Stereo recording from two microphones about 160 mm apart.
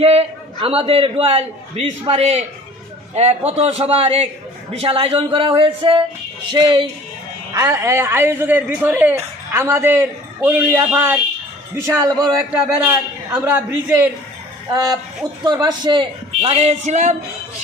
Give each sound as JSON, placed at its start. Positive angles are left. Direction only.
{"t": 0.0, "sound": "a man's voice", "side_deg": -35}
{"t": 12.6, "sound": "a man's voice", "side_deg": -5}
{"t": 15.4, "sound": "a man's voice", "side_deg": -25}